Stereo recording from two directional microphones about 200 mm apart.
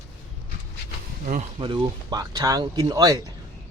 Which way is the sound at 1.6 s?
20° right (ahead or behind).